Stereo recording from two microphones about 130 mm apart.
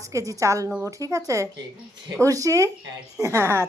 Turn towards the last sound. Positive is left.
turn(degrees=-20)  # may be behind; listen again after turning